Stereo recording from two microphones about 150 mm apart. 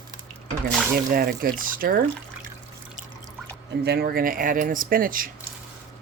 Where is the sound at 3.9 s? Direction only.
85° right; by 5.3 s 70° right (ahead or behind).